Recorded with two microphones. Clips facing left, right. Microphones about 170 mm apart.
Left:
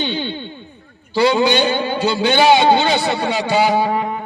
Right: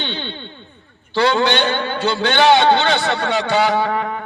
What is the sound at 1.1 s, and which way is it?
A man's voice, 10° left (ahead or behind).